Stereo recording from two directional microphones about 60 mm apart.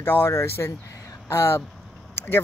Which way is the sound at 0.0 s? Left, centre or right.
Left.